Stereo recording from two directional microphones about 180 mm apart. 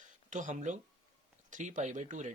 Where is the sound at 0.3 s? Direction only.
45° right (ahead or behind).